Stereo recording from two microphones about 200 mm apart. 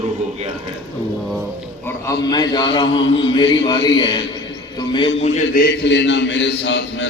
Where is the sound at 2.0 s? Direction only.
20° left (ahead or behind).